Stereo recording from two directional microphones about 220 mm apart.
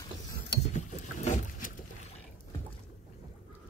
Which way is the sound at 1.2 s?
35° left (ahead or behind).